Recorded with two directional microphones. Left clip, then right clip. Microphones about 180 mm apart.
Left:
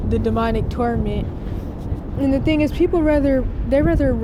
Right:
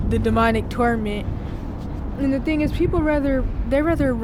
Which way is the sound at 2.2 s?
5° left (ahead or behind).